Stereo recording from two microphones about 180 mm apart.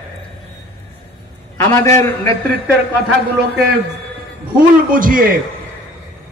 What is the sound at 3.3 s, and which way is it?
Speech, 60° right (ahead or behind).